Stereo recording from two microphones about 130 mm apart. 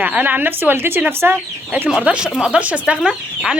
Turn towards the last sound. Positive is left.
turn(degrees=-5)  # may be behind; listen again after turning